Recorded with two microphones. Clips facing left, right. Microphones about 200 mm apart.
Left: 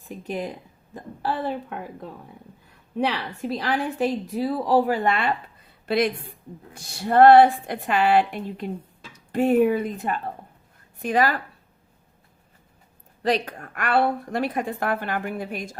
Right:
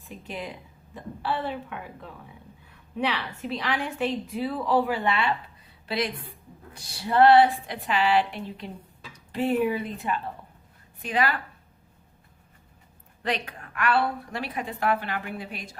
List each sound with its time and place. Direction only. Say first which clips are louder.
0.0 s a woman's voice: left 6 dB; 45° left (ahead or behind)
13.2 s a woman's voice: left 7 dB; 40° left (ahead or behind)